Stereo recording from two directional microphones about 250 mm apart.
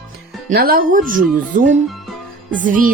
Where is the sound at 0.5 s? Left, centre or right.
Right.